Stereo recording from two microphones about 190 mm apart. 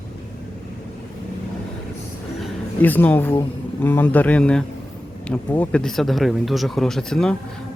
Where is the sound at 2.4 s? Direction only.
10° left (ahead or behind).